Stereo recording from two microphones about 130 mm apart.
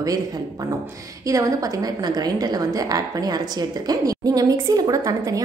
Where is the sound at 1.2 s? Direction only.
25° right (ahead or behind).